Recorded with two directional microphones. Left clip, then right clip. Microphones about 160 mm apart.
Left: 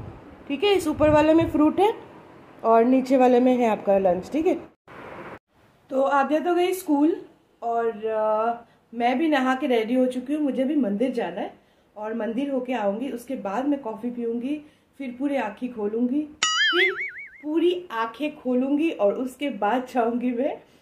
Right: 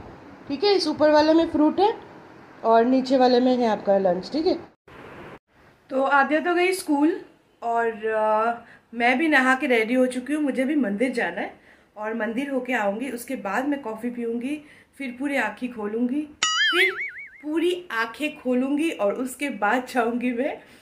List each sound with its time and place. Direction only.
0.5 s a woman's voice: centre (ahead or behind)
5.9 s a woman's voice: 10° left (ahead or behind)